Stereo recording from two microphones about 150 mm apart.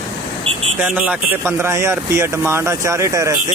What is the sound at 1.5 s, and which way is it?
Speech, 20° right (ahead or behind).